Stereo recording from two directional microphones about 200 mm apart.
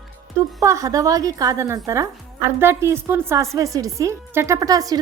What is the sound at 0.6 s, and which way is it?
A woman's voice, 15° right (ahead or behind).